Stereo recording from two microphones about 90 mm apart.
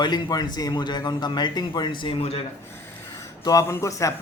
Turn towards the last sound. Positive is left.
turn(degrees=35)  # may be behind; listen again after turning